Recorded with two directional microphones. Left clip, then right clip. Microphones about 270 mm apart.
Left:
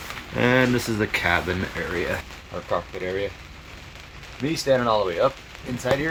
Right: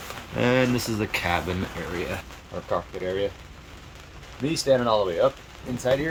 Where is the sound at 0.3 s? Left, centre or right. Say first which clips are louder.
Left 2 dB; centre.